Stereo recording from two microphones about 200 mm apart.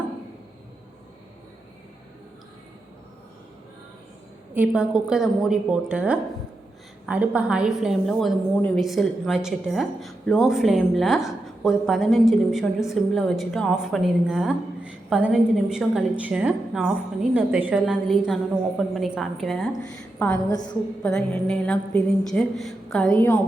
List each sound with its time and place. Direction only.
4.5 s a woman's voice: 5° right (ahead or behind)
20.5 s a woman's voice: 20° left (ahead or behind)
21.0 s a woman's voice: 5° left (ahead or behind)